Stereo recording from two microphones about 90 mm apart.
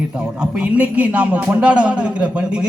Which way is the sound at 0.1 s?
10° right (ahead or behind).